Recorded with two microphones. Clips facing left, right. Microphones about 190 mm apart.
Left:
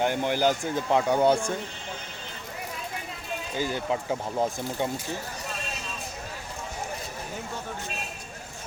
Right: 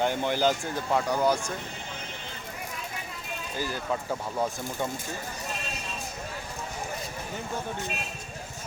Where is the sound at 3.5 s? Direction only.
20° left (ahead or behind).